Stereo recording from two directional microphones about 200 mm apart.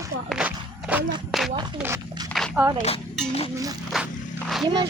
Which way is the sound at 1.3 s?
Centre (ahead or behind).